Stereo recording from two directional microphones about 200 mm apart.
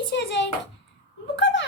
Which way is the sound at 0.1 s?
60° left (ahead or behind).